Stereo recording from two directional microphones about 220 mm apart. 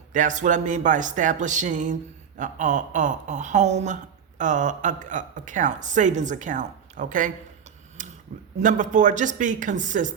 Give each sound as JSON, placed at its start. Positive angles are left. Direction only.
{"t": 0.1, "sound": "a woman's voice", "side_deg": -35}
{"t": 8.0, "sound": "a sound", "side_deg": -35}
{"t": 8.5, "sound": "a woman's voice", "side_deg": -35}